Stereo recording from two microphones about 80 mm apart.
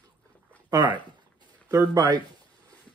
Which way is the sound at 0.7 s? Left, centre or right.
Right.